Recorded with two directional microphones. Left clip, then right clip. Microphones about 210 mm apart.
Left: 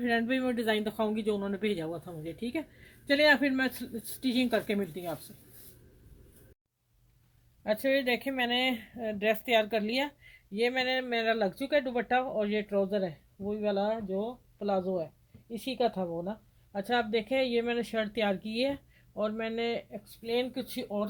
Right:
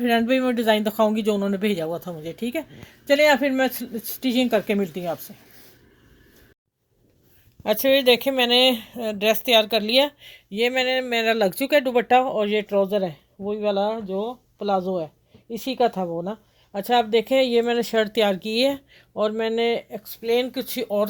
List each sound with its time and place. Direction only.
0.0 s speech: 50° right (ahead or behind)
7.6 s speech: 40° right (ahead or behind)